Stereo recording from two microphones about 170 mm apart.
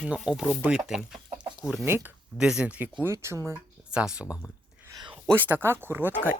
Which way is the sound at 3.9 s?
5° right (ahead or behind).